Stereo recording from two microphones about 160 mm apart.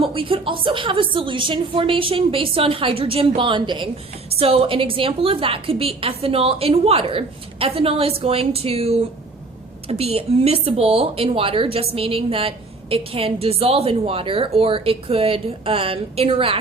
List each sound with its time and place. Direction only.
0.0 s a woman's voice: 35° right (ahead or behind)